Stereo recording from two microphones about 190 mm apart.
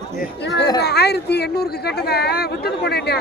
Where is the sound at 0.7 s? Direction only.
60° left (ahead or behind).